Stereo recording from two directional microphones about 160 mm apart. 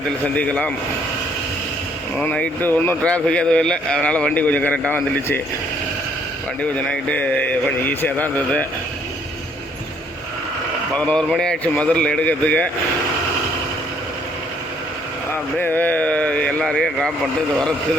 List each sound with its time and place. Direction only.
0.3 s speech: 10° left (ahead or behind)
2.1 s speech: 5° left (ahead or behind)
6.6 s speech: 5° left (ahead or behind)
10.9 s speech: 5° left (ahead or behind)
15.5 s speech: 10° left (ahead or behind)